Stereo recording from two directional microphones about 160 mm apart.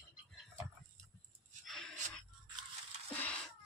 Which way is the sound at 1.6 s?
Centre (ahead or behind).